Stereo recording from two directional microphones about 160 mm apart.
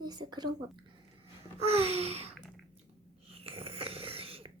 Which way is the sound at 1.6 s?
40° right (ahead or behind).